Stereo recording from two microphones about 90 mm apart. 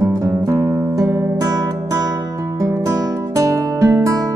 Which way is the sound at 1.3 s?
45° right (ahead or behind).